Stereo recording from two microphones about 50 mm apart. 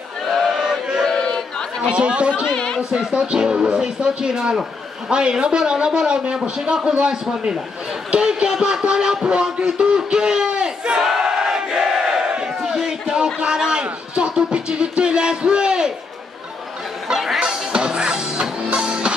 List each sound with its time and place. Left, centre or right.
0.5 s chant: centre
1.0 s a sound: centre
1.8 s speech: right
2.5 s a sound: centre
3.1 s a man's voice: centre
8.1 s music: centre
17.1 s music: centre
17.4 s music: centre